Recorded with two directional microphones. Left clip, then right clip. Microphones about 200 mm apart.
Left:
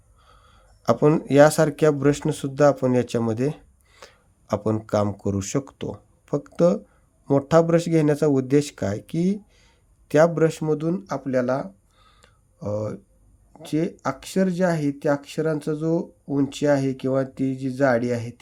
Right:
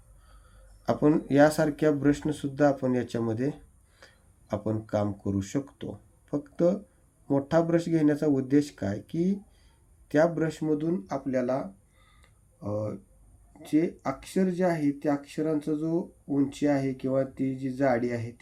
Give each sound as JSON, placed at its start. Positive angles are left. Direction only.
{"t": 0.8, "sound": "speech", "side_deg": 40}